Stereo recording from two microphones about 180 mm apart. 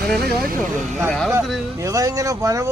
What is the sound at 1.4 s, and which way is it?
Speech, centre (ahead or behind).